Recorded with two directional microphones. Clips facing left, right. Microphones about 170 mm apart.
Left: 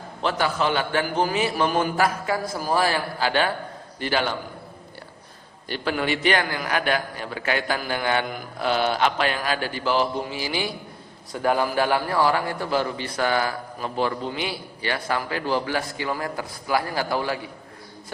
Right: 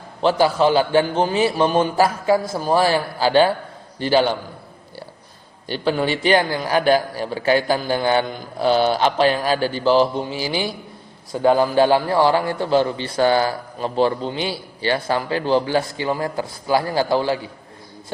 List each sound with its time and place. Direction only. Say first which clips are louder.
0.2 s a man's voice: right 7 dB; 30° right (ahead or behind)
5.6 s a man's voice: right 5 dB; 30° right (ahead or behind)